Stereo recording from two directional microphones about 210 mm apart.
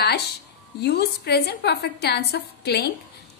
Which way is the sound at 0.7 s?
50° left (ahead or behind).